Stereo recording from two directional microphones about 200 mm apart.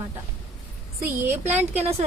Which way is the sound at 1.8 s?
30° right (ahead or behind).